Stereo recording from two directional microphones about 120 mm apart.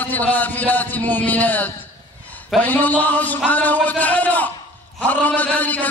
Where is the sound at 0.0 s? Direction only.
15° left (ahead or behind).